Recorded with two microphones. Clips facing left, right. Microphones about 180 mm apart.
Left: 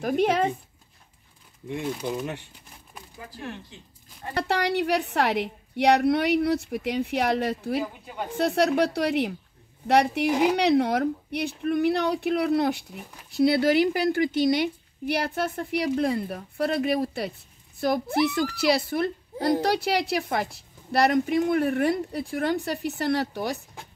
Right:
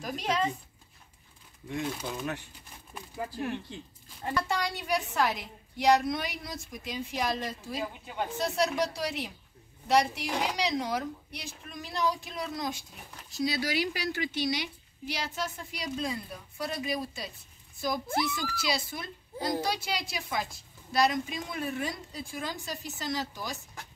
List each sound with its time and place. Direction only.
0.0 s a woman's voice: 55° left (ahead or behind)
1.7 s speech: 15° left (ahead or behind)
4.4 s a woman's voice: 65° left (ahead or behind)